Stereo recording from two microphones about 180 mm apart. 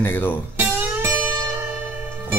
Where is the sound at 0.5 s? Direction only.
10° right (ahead or behind).